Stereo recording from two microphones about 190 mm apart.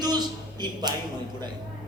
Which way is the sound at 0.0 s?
20° right (ahead or behind).